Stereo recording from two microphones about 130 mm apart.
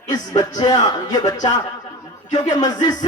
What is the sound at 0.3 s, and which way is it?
Speech, 30° left (ahead or behind).